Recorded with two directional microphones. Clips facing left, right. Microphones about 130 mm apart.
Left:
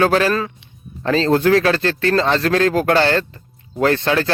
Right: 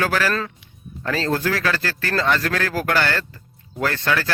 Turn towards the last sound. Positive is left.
turn(degrees=25)  # may be behind; listen again after turning